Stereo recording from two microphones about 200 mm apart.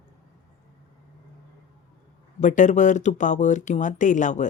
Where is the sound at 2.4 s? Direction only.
40° left (ahead or behind).